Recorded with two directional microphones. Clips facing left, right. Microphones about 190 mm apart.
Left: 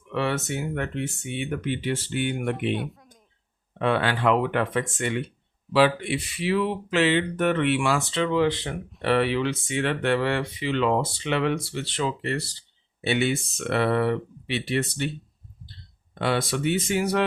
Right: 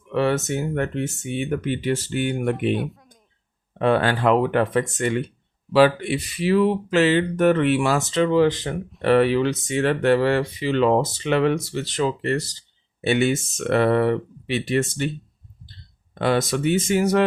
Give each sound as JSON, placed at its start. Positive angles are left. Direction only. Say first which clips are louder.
{"t": 0.1, "sound": "speech", "louder": "right 5 dB", "side_deg": -40}
{"t": 2.7, "sound": "speech", "louder": "right 4 dB", "side_deg": 0}
{"t": 3.8, "sound": "speech", "louder": "right 4 dB", "side_deg": -40}
{"t": 16.1, "sound": "speech", "louder": "right 4 dB", "side_deg": -45}